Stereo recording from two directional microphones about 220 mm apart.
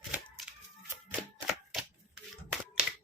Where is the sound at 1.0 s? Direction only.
5° right (ahead or behind).